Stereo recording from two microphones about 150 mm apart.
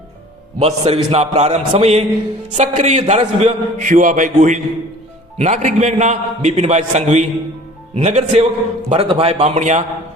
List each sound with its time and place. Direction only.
0.6 s a man's voice: 40° right (ahead or behind)